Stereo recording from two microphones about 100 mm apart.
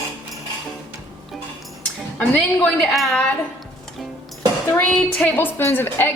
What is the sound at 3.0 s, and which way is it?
Speech, centre (ahead or behind).